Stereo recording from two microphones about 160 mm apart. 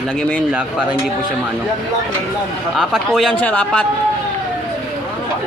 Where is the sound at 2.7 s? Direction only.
Centre (ahead or behind).